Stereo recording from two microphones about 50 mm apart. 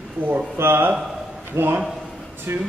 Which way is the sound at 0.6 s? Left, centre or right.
Right.